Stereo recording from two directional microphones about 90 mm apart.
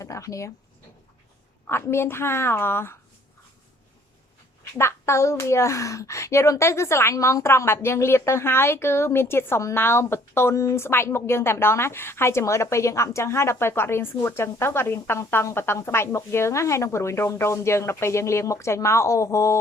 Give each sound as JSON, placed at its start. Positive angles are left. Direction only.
{"t": 0.0, "sound": "speech", "side_deg": 35}
{"t": 1.6, "sound": "a child's voice", "side_deg": 30}
{"t": 4.8, "sound": "a child's voice", "side_deg": 30}